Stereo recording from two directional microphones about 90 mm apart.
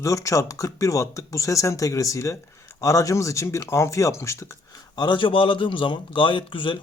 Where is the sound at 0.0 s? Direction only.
35° left (ahead or behind).